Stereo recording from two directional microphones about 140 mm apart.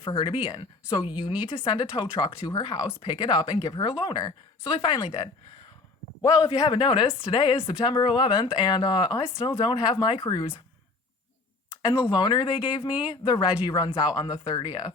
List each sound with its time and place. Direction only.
0.0 s speech: 35° left (ahead or behind)
11.8 s speech: 30° left (ahead or behind)